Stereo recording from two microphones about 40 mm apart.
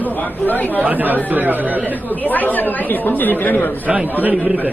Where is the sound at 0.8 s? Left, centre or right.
Right.